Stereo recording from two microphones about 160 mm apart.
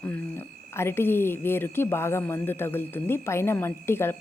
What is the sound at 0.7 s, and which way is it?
A woman's voice, 15° left (ahead or behind).